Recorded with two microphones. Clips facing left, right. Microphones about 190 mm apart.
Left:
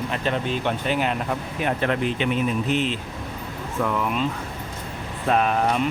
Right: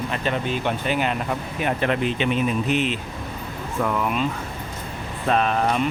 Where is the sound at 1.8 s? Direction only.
20° right (ahead or behind).